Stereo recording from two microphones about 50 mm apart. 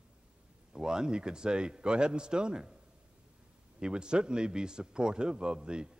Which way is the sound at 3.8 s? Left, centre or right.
Centre.